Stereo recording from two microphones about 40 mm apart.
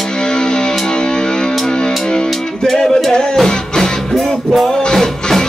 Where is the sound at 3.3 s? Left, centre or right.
Centre.